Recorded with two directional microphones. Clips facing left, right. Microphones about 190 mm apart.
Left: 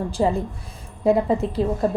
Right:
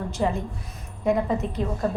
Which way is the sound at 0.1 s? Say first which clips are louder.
Left 3 dB; 30° left (ahead or behind).